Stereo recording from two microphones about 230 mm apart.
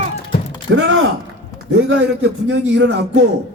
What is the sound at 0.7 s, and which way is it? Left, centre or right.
Music, right.